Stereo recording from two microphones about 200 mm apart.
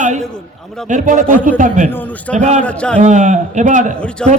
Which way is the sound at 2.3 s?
35° right (ahead or behind).